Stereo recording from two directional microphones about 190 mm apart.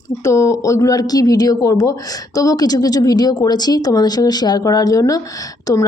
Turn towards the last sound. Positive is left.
turn(degrees=15)  # may be behind; listen again after turning